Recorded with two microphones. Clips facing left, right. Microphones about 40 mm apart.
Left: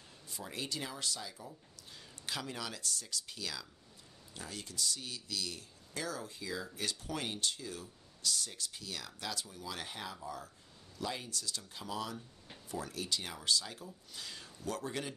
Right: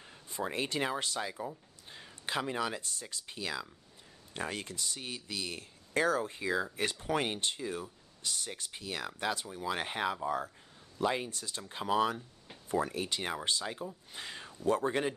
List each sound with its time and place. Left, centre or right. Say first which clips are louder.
0.0 s speech: right 10 dB; right
4.3 s speech: right 9 dB; right